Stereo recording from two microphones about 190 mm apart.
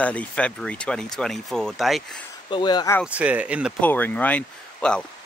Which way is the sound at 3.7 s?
10° left (ahead or behind).